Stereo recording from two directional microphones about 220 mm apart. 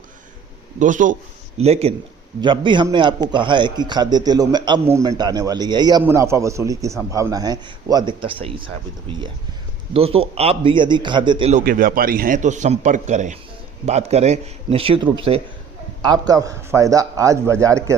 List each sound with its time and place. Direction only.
0.8 s a man's voice: 35° right (ahead or behind)
9.9 s a man's voice: 25° right (ahead or behind)
11.6 s a man's voice: 40° right (ahead or behind); by 17.9 s 15° right (ahead or behind)